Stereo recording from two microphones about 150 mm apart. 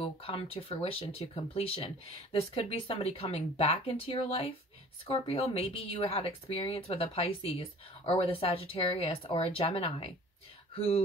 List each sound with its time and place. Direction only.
0.0 s speech: 40° left (ahead or behind)